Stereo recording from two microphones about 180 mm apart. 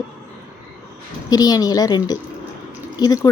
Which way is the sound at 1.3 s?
20° left (ahead or behind).